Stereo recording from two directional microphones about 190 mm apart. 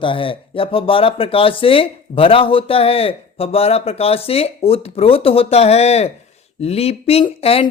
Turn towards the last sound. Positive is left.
turn(degrees=30)  # may be behind; listen again after turning